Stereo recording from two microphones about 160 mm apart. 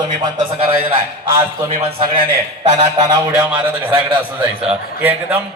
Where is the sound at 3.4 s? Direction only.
10° right (ahead or behind).